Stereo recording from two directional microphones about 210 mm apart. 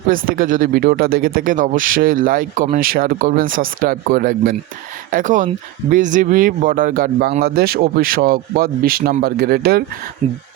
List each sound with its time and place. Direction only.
0.1 s speech: 40° right (ahead or behind)